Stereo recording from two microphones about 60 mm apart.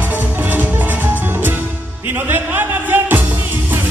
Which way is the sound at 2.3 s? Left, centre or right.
Right.